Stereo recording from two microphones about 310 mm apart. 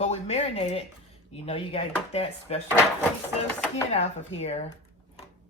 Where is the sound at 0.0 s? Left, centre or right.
Left.